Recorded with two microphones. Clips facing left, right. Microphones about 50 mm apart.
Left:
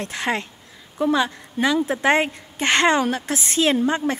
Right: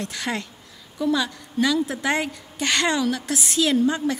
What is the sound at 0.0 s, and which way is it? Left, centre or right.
A woman's voice, left.